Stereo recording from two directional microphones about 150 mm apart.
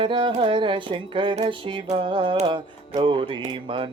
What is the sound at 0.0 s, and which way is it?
Music, 35° right (ahead or behind).